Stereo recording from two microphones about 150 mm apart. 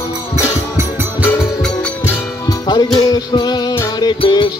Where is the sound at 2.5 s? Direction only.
25° left (ahead or behind).